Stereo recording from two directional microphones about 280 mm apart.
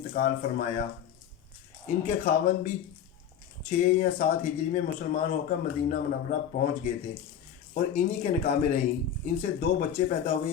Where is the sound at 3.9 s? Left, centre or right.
Left.